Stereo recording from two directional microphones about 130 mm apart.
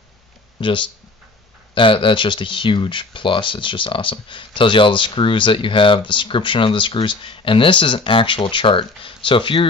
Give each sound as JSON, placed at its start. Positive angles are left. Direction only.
{"t": 0.6, "sound": "speech", "side_deg": 40}